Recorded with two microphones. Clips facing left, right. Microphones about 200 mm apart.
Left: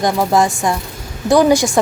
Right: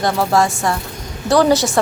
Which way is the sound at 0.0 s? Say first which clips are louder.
Left 1 dB; 15° left (ahead or behind).